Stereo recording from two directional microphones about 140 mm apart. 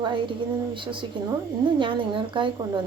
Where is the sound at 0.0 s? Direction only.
35° right (ahead or behind).